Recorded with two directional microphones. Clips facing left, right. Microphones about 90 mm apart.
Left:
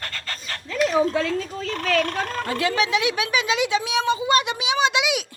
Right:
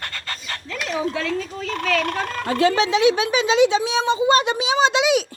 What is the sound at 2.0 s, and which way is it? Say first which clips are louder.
Speech: right 1 dB; 35° right (ahead or behind).